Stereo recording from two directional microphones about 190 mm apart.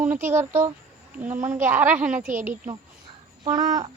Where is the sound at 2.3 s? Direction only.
45° right (ahead or behind).